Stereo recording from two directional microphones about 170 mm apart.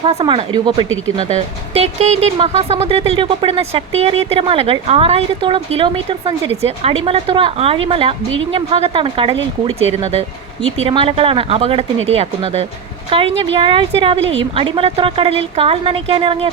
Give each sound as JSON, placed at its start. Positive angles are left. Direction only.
{"t": 0.0, "sound": "speech", "side_deg": -35}
{"t": 1.7, "sound": "speech", "side_deg": -35}